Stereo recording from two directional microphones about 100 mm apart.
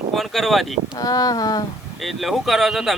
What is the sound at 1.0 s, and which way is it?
Speech, 40° left (ahead or behind).